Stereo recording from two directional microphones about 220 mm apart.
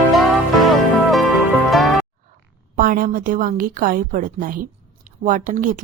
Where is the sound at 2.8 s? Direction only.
40° right (ahead or behind).